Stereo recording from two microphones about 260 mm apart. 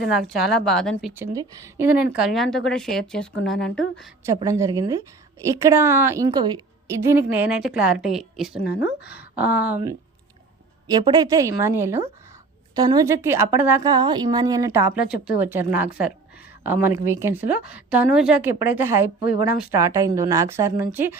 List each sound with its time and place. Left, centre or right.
0.1 s a woman's voice: centre
1.2 s a woman's voice: centre
4.3 s a woman's voice: centre
8.6 s speech: left
9.0 s speech: centre
10.8 s a woman's voice: centre